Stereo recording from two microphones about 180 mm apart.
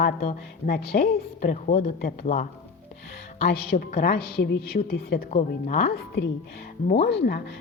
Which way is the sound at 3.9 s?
65° left (ahead or behind).